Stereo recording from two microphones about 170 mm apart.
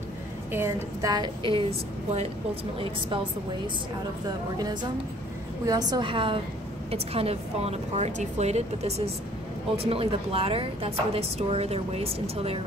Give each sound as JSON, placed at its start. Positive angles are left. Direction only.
{"t": 0.5, "sound": "a woman's voice", "side_deg": -15}
{"t": 5.7, "sound": "a woman's voice", "side_deg": -25}